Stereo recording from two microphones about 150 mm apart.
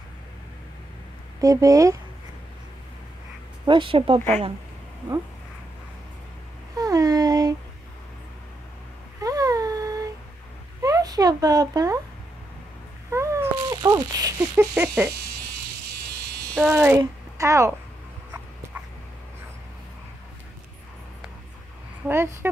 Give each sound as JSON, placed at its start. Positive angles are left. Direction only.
{"t": 1.4, "sound": "speech", "side_deg": -25}
{"t": 3.6, "sound": "speech", "side_deg": -35}
{"t": 6.8, "sound": "a sound", "side_deg": -25}
{"t": 9.2, "sound": "a sound", "side_deg": -25}
{"t": 13.1, "sound": "cat", "side_deg": -20}
{"t": 15.0, "sound": "speech", "side_deg": -10}
{"t": 16.5, "sound": "speech", "side_deg": -5}
{"t": 17.0, "sound": "speech", "side_deg": -20}
{"t": 22.0, "sound": "speech", "side_deg": -15}